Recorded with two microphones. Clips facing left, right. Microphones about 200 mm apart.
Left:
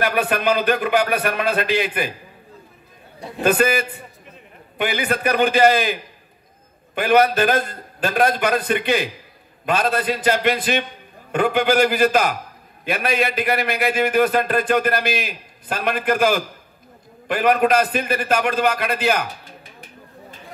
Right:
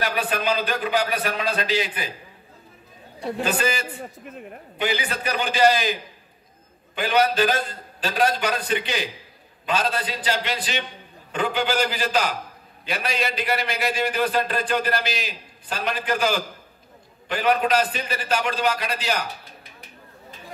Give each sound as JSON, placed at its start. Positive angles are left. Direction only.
{"t": 0.0, "sound": "a man's voice", "side_deg": 60}
{"t": 3.4, "sound": "a man's voice", "side_deg": 55}
{"t": 7.0, "sound": "a man's voice", "side_deg": 55}